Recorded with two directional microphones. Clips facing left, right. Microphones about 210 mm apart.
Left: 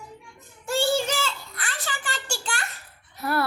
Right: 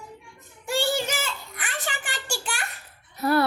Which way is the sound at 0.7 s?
15° right (ahead or behind).